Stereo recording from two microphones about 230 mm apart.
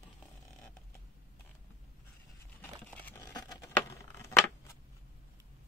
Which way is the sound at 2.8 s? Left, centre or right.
Centre.